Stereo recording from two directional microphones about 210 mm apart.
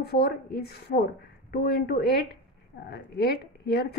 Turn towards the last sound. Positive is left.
turn(degrees=50)  # may be behind; listen again after turning